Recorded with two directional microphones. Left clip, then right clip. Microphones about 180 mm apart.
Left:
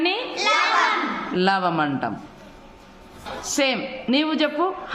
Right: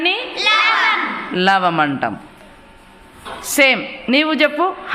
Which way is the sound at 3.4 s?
20° right (ahead or behind).